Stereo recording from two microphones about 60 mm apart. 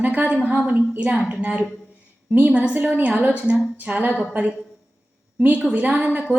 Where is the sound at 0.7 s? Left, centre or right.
Right.